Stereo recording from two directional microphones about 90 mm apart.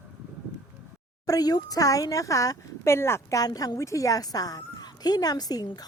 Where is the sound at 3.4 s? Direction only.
45° left (ahead or behind).